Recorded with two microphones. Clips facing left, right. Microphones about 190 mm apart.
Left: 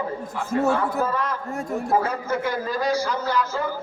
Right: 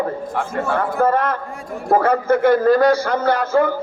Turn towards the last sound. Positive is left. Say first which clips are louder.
# right 8 dB
turn(degrees=-60)  # may be behind; listen again after turning